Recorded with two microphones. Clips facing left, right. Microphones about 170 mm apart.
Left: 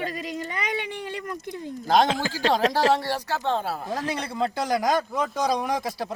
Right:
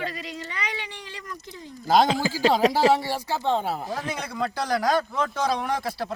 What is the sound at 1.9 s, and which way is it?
Speech, 5° right (ahead or behind).